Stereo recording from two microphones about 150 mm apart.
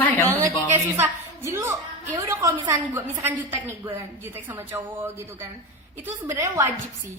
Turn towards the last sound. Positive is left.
turn(degrees=-20)  # may be behind; listen again after turning